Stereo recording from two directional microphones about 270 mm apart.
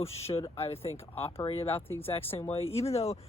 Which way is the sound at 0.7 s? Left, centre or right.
Centre.